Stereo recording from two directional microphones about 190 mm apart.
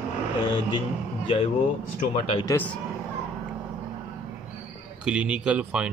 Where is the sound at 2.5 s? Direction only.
10° left (ahead or behind).